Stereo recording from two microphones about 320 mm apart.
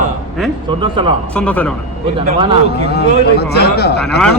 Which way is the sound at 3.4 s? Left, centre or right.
Left.